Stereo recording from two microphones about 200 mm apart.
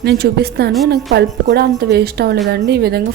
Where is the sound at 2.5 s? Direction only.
55° right (ahead or behind).